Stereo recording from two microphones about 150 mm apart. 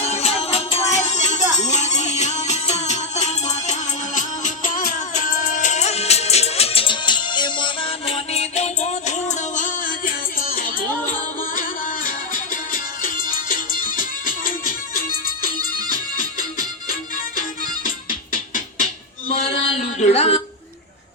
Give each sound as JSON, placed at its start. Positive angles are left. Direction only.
{"t": 0.0, "sound": "music", "side_deg": 45}
{"t": 17.8, "sound": "music", "side_deg": 65}
{"t": 19.3, "sound": "a sound", "side_deg": 40}